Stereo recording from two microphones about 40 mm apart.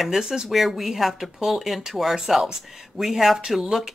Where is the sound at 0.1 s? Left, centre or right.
Centre.